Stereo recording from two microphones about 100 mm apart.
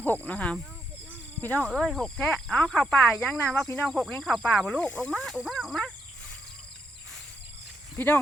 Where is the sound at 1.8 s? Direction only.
5° left (ahead or behind).